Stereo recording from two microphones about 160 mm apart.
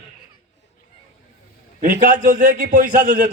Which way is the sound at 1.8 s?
60° right (ahead or behind).